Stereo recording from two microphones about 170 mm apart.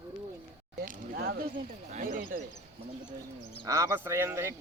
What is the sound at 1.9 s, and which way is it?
Speech, 50° right (ahead or behind).